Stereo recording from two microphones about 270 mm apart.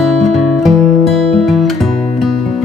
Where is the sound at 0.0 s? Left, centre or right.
Centre.